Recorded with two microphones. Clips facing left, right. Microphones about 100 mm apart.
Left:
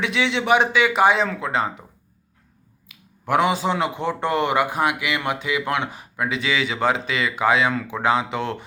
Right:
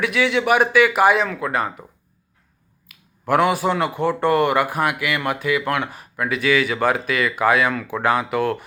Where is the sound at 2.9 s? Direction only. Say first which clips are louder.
Right 2 dB; 20° left (ahead or behind).